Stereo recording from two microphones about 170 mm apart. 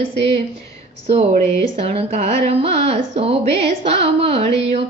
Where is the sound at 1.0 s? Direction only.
35° right (ahead or behind).